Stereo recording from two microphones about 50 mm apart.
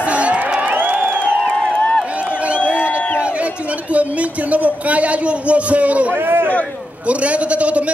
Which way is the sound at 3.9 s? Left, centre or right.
Right.